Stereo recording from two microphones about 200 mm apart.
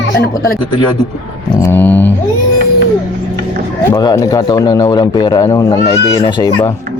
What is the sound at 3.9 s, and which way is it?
A man's voice, 20° left (ahead or behind).